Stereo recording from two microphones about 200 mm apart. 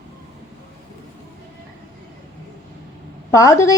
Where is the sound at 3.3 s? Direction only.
15° left (ahead or behind).